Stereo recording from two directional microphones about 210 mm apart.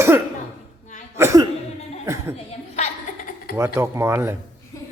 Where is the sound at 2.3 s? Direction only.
30° left (ahead or behind).